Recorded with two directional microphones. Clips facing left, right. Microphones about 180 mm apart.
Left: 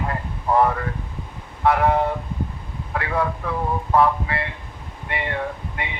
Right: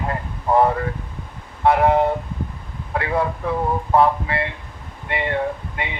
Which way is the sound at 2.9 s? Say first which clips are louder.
Right 2 dB; 30° right (ahead or behind).